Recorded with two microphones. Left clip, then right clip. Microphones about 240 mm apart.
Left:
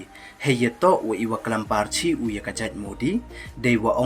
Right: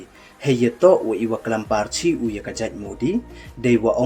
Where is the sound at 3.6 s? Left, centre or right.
Left.